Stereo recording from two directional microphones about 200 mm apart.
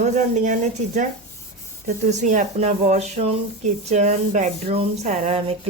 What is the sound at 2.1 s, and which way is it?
Speech, 35° right (ahead or behind).